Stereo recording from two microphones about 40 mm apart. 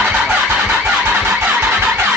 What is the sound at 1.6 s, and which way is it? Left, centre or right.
Vehicle, right.